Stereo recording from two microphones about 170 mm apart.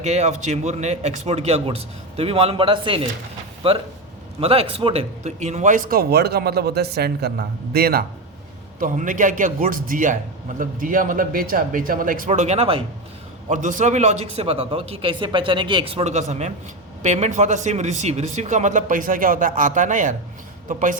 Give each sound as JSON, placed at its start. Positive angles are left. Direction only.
{"t": 0.0, "sound": "speech", "side_deg": -40}
{"t": 8.8, "sound": "speech", "side_deg": -50}
{"t": 13.5, "sound": "speech", "side_deg": -50}